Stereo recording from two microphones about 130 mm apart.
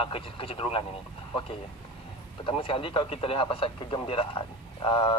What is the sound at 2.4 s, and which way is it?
Speech, 45° left (ahead or behind).